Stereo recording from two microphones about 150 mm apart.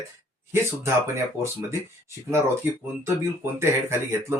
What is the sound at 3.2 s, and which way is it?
Speech, 15° right (ahead or behind).